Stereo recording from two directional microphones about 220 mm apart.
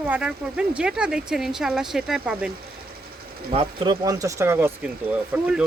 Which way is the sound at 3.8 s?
20° right (ahead or behind).